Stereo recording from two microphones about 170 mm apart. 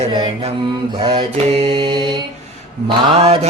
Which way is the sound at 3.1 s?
40° right (ahead or behind).